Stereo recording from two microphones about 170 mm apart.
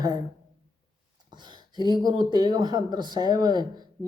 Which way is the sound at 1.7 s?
25° right (ahead or behind).